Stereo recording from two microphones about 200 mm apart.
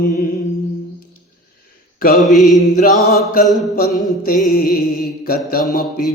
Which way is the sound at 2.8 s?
40° left (ahead or behind).